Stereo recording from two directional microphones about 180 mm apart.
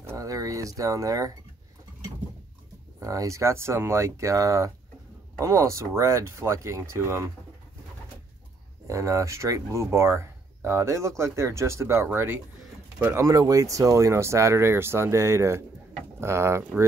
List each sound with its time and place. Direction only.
0.0 s speech: 15° right (ahead or behind)
3.0 s speech: 20° right (ahead or behind)
8.8 s speech: 15° right (ahead or behind)